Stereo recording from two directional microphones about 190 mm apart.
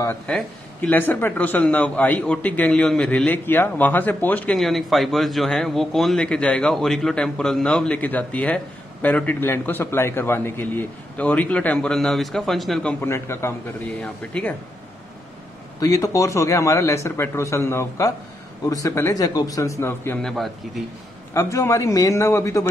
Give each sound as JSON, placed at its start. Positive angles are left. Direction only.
{"t": 0.1, "sound": "a man's voice", "side_deg": 10}
{"t": 15.8, "sound": "a man's voice", "side_deg": 20}
{"t": 20.2, "sound": "a man's voice", "side_deg": 0}
{"t": 21.3, "sound": "a man's voice", "side_deg": 15}